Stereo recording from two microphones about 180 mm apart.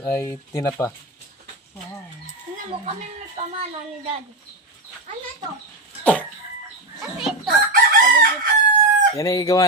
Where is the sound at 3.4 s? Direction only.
40° right (ahead or behind).